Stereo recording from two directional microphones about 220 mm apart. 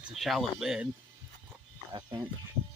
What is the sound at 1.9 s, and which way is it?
Speech, 15° right (ahead or behind).